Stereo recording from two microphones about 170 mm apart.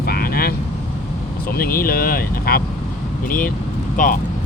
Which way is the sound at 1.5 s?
60° left (ahead or behind).